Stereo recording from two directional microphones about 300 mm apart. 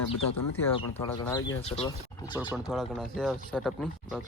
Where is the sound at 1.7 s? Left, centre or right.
Centre.